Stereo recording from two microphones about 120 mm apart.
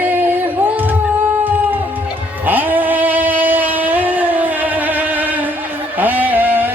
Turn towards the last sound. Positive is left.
turn(degrees=-15)  # may be behind; listen again after turning